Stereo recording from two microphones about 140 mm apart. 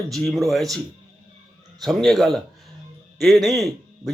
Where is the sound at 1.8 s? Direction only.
Centre (ahead or behind).